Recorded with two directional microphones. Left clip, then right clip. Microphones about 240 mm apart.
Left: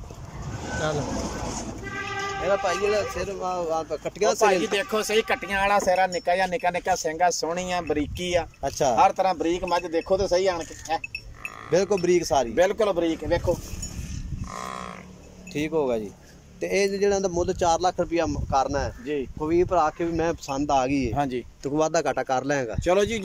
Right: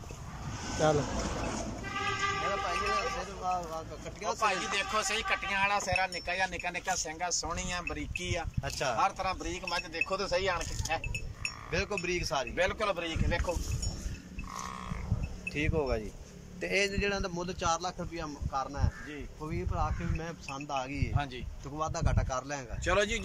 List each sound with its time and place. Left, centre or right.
0.9 s vehicle: left
2.6 s a man's voice: left
15.5 s speech: centre; by 21.1 s left
21.1 s a man's voice: left
21.7 s speech: left
22.8 s a man's voice: left